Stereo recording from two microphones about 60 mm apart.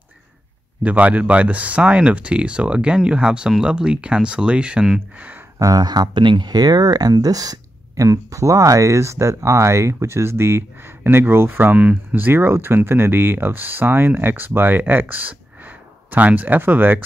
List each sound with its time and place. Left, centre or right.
0.8 s speech: right
5.6 s speech: right
11.6 s speech: right
12.3 s speech: right